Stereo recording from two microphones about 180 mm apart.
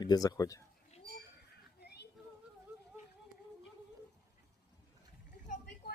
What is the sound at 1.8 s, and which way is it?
Child singing, 60° left (ahead or behind).